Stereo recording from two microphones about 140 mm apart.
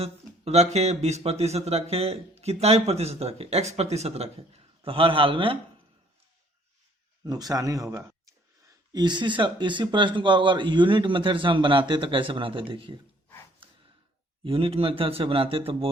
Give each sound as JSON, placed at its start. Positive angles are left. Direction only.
{"t": 0.0, "sound": "speech", "side_deg": -50}
{"t": 7.3, "sound": "speech", "side_deg": -25}
{"t": 14.4, "sound": "speech", "side_deg": -40}